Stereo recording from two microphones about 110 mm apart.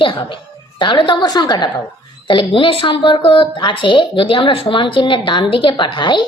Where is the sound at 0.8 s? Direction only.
45° left (ahead or behind).